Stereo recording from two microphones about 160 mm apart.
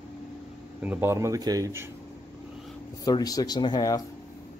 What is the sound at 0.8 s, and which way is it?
Speech, 10° right (ahead or behind).